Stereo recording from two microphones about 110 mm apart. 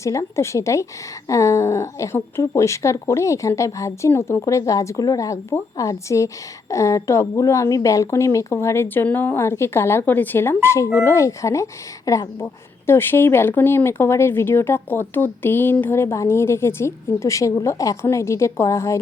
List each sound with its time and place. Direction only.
0.0 s speech: 25° left (ahead or behind)